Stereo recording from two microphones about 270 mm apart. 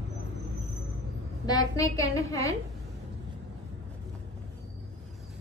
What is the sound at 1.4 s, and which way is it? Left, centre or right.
A woman's voice, centre.